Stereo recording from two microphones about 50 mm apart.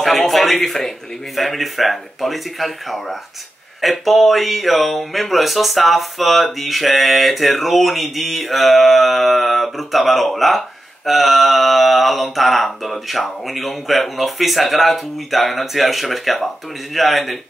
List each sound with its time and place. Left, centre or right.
0.0 s speech: centre